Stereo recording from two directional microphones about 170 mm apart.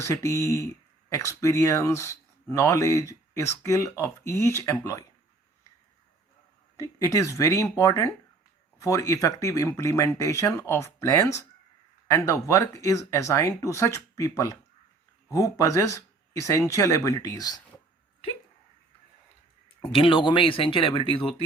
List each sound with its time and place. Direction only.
0.0 s speech: 15° left (ahead or behind)
6.7 s speech: 20° left (ahead or behind)
19.8 s speech: 30° left (ahead or behind)